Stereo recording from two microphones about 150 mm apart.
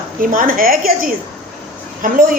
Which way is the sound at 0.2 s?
65° right (ahead or behind).